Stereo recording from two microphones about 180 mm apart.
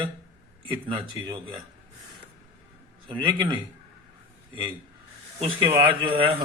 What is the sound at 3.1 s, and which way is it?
Speech, 25° right (ahead or behind).